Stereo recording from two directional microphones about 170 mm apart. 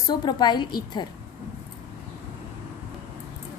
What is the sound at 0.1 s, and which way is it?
Speech, 25° left (ahead or behind).